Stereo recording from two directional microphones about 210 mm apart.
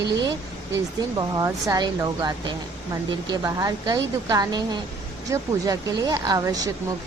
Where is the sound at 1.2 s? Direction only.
15° right (ahead or behind).